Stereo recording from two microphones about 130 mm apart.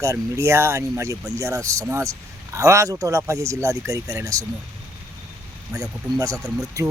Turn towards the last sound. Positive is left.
turn(degrees=-25)  # may be behind; listen again after turning